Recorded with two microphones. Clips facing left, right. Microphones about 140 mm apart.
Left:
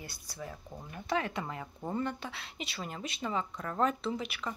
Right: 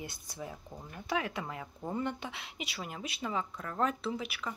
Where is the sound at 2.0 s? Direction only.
15° right (ahead or behind).